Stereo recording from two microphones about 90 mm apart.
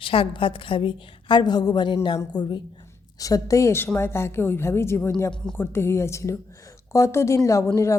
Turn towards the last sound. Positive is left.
turn(degrees=35)  # may be behind; listen again after turning